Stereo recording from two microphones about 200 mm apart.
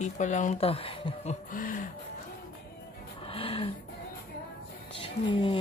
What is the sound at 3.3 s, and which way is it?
Music, 30° left (ahead or behind).